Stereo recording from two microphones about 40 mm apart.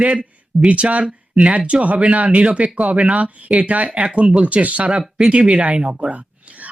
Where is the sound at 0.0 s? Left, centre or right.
Right.